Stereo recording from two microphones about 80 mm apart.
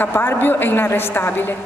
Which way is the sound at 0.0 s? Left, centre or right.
Left.